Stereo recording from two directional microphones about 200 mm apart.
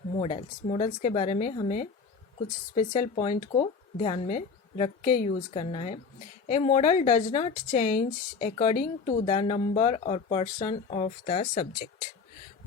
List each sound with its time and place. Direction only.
0.2 s a woman's voice: 30° left (ahead or behind)